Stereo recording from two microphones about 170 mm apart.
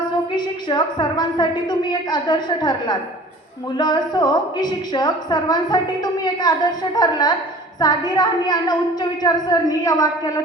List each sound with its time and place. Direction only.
0.3 s a woman's voice: 25° left (ahead or behind)